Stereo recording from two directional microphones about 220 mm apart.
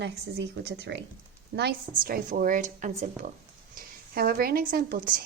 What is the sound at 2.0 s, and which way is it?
A woman's voice, 40° right (ahead or behind).